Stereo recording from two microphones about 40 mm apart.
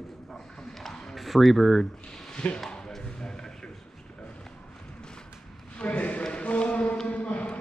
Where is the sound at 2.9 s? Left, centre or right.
Centre.